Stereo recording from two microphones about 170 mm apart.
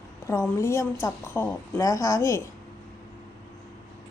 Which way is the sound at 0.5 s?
15° left (ahead or behind).